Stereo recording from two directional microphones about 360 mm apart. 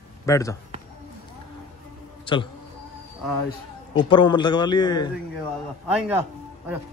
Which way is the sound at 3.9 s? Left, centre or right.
Centre.